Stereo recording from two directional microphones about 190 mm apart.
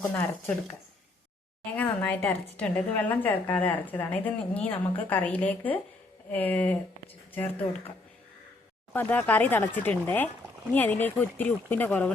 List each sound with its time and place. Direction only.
0.0 s a woman's voice: 10° left (ahead or behind)
8.9 s a woman's voice: 10° left (ahead or behind)